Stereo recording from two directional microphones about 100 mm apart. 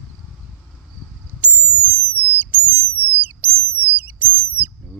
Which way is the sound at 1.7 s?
15° right (ahead or behind).